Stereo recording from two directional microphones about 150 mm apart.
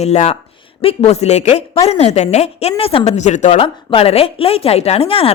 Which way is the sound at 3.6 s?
40° left (ahead or behind).